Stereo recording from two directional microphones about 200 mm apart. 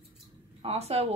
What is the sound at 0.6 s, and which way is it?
Speech, 30° right (ahead or behind).